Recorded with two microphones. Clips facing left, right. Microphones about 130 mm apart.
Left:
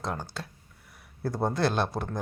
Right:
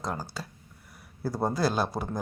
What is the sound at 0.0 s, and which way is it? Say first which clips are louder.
Speech: even; centre (ahead or behind).